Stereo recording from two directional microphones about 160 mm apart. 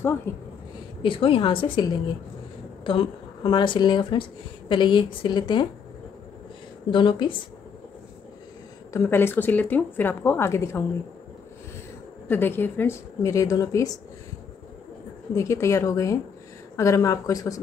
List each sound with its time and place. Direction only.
0.3 s a woman's voice: 15° left (ahead or behind)
1.0 s a woman's voice: 35° left (ahead or behind)
6.9 s a woman's voice: 30° left (ahead or behind)
8.9 s a woman's voice: 15° left (ahead or behind)
12.3 s a woman's voice: 15° left (ahead or behind)
15.3 s a woman's voice: 20° left (ahead or behind)